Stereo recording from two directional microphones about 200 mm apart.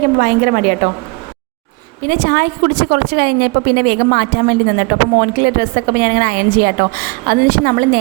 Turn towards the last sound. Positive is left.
turn(degrees=-45)  # may be behind; listen again after turning